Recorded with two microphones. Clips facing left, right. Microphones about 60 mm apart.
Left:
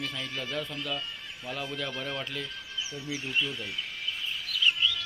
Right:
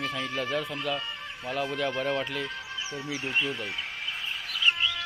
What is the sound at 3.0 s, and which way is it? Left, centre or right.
Speech, right.